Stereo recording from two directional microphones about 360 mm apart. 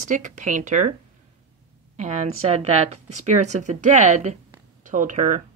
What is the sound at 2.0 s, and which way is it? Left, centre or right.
Speech, centre.